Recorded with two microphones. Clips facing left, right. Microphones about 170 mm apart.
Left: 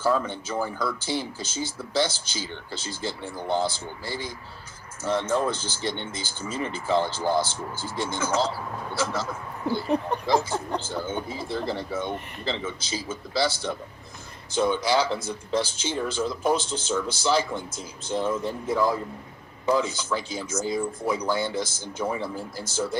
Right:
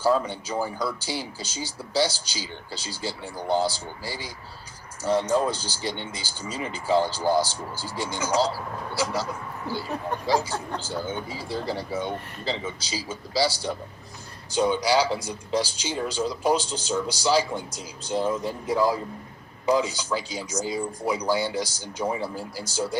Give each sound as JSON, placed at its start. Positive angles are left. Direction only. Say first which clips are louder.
{"t": 0.2, "sound": "speech", "louder": "even", "side_deg": -15}
{"t": 9.9, "sound": "speech", "louder": "left 6 dB", "side_deg": 15}
{"t": 10.2, "sound": "speech", "louder": "right 2 dB", "side_deg": -10}